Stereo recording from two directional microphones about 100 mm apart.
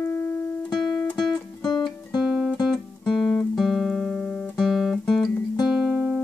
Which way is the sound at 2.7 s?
10° left (ahead or behind).